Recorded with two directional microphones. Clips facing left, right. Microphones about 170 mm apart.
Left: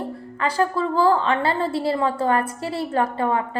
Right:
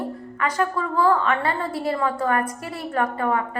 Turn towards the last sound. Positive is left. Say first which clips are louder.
# left 1 dB
turn(degrees=30)  # may be behind; listen again after turning